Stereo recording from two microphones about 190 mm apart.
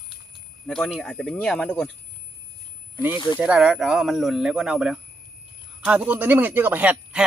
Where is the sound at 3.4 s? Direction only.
5° right (ahead or behind).